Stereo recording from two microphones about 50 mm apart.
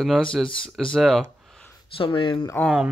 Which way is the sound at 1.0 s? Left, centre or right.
Centre.